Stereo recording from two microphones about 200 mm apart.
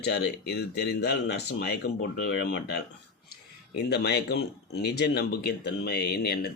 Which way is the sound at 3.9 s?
55° left (ahead or behind).